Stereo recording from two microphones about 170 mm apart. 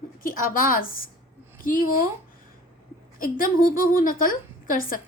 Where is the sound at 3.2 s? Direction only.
55° left (ahead or behind).